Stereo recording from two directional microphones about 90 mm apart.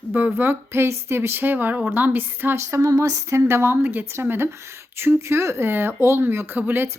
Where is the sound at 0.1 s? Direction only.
20° right (ahead or behind).